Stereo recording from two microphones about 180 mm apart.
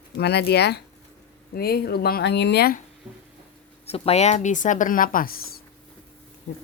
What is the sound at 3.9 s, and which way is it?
Speech, 35° left (ahead or behind).